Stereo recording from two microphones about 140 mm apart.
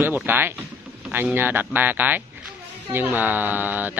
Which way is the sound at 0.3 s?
15° right (ahead or behind).